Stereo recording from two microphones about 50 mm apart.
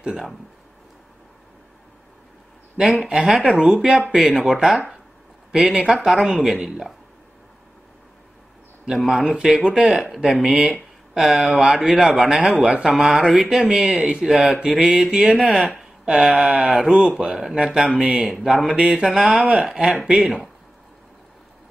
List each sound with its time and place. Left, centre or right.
0.0 s speech: centre
2.8 s a man's voice: centre
8.8 s a man's voice: centre